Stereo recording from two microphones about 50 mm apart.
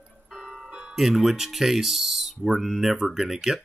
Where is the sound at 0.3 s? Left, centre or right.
Centre.